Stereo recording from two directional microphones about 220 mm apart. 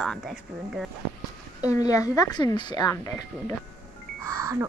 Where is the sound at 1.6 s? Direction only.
15° left (ahead or behind).